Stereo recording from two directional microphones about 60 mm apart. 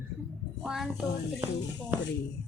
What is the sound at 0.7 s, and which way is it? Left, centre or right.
Speech, centre.